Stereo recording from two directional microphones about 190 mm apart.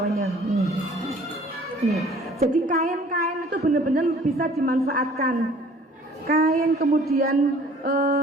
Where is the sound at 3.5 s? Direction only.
50° right (ahead or behind).